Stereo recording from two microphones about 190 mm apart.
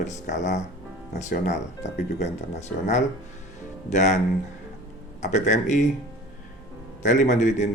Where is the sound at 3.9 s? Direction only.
40° left (ahead or behind).